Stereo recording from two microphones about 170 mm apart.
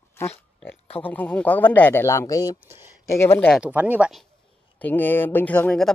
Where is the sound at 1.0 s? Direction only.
10° left (ahead or behind).